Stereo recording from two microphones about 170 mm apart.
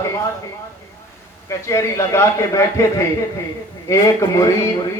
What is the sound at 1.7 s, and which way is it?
A man's voice, 15° left (ahead or behind).